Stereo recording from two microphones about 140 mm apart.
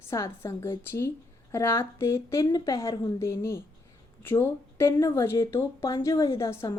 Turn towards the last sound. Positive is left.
turn(degrees=20)  # may be behind; listen again after turning